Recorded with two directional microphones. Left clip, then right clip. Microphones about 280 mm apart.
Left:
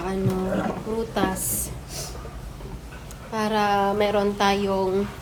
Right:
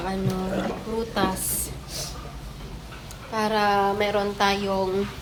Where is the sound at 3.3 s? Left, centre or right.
Centre.